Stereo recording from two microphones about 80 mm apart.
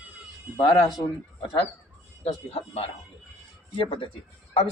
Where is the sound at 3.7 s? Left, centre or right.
Left.